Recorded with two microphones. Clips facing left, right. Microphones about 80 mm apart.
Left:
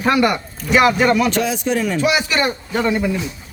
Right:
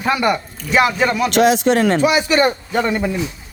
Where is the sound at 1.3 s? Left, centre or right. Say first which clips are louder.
Right 6 dB; right.